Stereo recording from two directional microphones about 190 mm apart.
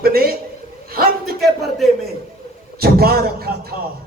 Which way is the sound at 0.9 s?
50° right (ahead or behind).